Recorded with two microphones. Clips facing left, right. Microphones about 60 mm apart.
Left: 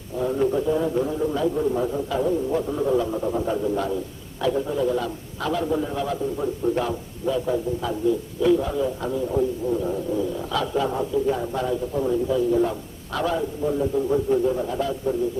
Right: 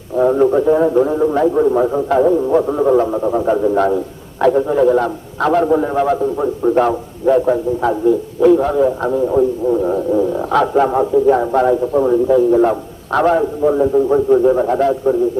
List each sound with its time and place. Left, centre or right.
0.2 s a man's voice: right